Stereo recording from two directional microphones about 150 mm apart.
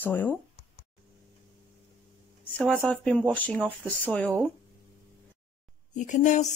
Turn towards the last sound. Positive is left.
turn(degrees=55)  # may be behind; listen again after turning